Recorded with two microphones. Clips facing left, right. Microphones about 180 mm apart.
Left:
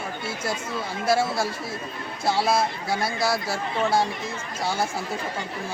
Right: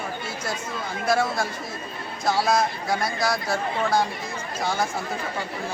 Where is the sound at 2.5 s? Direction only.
5° left (ahead or behind).